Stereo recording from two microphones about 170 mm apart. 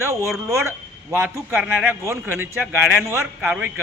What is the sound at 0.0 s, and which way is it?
A man's voice, 15° right (ahead or behind).